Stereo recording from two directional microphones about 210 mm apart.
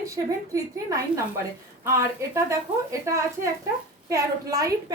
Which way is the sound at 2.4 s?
15° right (ahead or behind).